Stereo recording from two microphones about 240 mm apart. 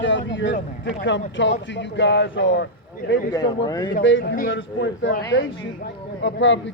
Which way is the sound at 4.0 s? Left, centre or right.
Left.